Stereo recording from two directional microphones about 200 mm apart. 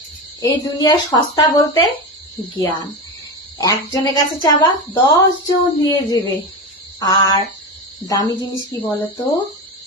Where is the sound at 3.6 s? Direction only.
20° left (ahead or behind).